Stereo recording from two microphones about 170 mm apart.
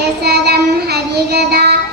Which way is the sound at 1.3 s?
70° right (ahead or behind).